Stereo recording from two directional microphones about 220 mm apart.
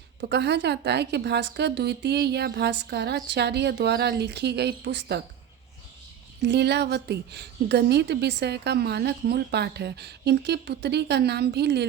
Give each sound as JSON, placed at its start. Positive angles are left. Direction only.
{"t": 0.2, "sound": "a woman's voice", "side_deg": -50}
{"t": 6.5, "sound": "a woman's voice", "side_deg": -50}